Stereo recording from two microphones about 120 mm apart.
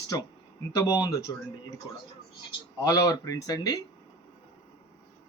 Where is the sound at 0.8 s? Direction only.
30° left (ahead or behind).